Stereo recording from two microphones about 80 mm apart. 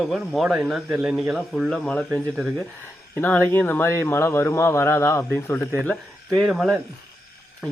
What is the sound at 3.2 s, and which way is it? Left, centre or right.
A man's voice, left.